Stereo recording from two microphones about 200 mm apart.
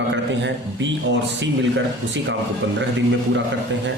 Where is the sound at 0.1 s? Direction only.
65° right (ahead or behind).